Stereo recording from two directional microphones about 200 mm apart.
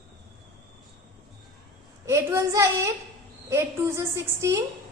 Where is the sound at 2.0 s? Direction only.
15° right (ahead or behind).